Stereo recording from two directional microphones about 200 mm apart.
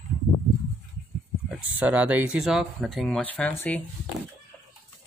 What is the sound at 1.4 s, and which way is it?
Speech, 5° right (ahead or behind).